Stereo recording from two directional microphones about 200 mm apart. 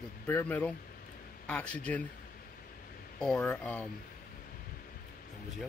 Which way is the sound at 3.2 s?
5° left (ahead or behind).